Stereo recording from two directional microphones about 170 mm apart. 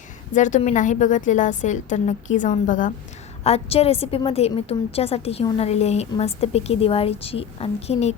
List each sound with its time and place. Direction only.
0.3 s a woman's voice: 45° left (ahead or behind)
3.4 s a woman's voice: 35° left (ahead or behind)